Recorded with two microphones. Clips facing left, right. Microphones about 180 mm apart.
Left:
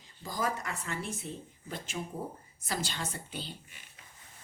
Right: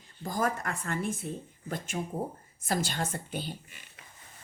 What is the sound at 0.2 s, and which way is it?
Speech, 50° right (ahead or behind).